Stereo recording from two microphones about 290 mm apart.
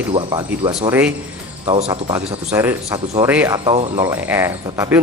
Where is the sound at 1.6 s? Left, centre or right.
Centre.